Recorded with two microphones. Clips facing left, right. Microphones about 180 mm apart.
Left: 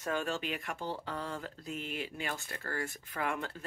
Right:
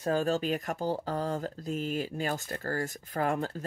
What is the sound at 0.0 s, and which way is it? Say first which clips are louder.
Speech: right 7 dB; 35° right (ahead or behind).